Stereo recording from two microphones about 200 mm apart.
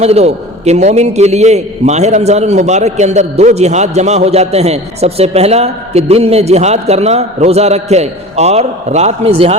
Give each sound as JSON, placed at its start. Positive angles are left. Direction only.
{"t": 0.0, "sound": "a man's voice", "side_deg": -30}